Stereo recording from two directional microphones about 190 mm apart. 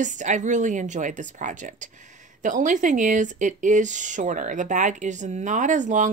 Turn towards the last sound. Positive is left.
turn(degrees=-40)  # may be behind; listen again after turning